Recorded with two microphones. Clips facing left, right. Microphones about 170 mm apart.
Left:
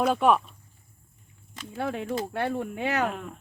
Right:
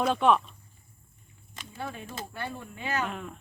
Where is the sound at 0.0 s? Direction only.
5° left (ahead or behind).